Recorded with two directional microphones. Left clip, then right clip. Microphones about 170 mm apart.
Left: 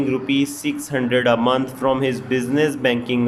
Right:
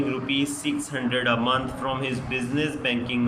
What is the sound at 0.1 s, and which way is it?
Speech, 30° left (ahead or behind).